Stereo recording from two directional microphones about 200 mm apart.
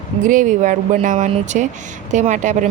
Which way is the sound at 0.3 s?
40° right (ahead or behind).